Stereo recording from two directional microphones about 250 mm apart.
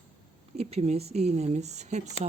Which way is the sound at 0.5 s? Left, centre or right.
Right.